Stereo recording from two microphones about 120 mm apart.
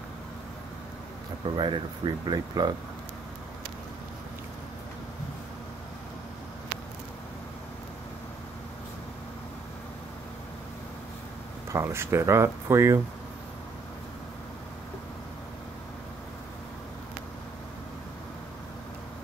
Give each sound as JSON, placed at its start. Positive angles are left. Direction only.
{"t": 1.4, "sound": "speech", "side_deg": -40}
{"t": 11.7, "sound": "speech", "side_deg": -20}